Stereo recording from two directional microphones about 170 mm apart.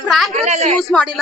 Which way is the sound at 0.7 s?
5° left (ahead or behind).